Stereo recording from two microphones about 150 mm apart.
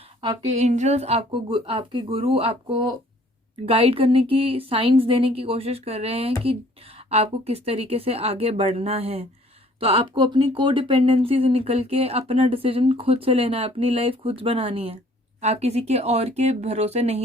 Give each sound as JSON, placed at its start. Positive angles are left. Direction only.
{"t": 0.5, "sound": "speech", "side_deg": -50}